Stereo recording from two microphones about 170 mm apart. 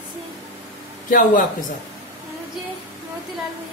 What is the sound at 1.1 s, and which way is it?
Speech, 50° left (ahead or behind).